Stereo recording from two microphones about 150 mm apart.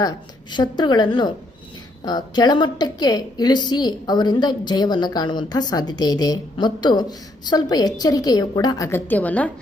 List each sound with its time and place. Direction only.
0.0 s a woman's voice: 30° left (ahead or behind)
8.9 s a woman's voice: 15° left (ahead or behind)